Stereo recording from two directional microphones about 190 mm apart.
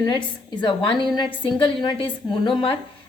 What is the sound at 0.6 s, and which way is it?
A woman's voice, 25° left (ahead or behind).